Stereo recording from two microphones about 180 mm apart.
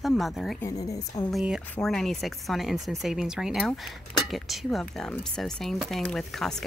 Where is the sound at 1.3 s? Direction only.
Centre (ahead or behind).